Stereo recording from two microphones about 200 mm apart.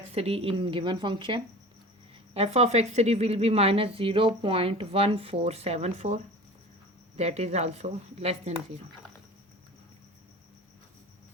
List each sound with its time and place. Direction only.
0.1 s a woman's voice: 30° right (ahead or behind)